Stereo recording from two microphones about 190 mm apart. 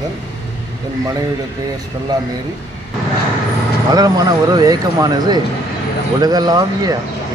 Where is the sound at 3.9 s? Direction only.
20° right (ahead or behind).